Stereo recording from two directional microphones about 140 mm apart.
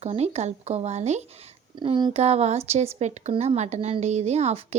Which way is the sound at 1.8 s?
35° right (ahead or behind).